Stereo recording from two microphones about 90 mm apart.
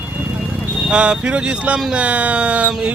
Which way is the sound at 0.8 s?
10° right (ahead or behind).